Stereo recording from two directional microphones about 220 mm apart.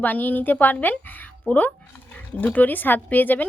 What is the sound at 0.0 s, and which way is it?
Speech, 10° left (ahead or behind).